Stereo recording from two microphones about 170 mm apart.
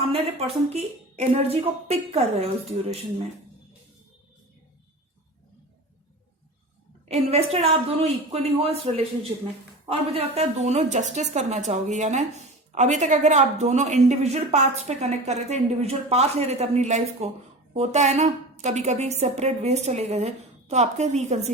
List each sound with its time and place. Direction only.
0.1 s speech: 35° right (ahead or behind)
7.1 s speech: 40° right (ahead or behind)
10.1 s a woman's voice: 35° right (ahead or behind)